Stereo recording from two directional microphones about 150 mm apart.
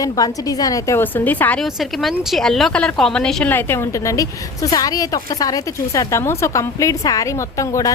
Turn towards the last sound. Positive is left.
turn(degrees=20)  # may be behind; listen again after turning